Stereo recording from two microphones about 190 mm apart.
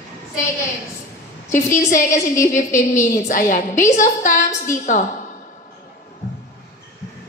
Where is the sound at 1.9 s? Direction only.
40° left (ahead or behind).